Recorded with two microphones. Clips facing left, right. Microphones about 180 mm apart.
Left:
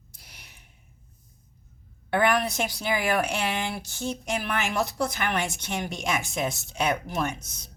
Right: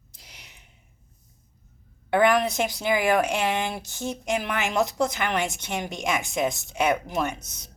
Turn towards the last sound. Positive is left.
turn(degrees=-20)  # may be behind; listen again after turning